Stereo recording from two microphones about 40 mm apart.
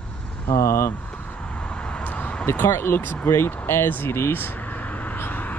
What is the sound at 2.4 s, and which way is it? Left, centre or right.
Speech, left.